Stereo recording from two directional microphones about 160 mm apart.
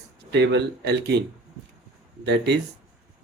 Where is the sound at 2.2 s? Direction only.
90° right.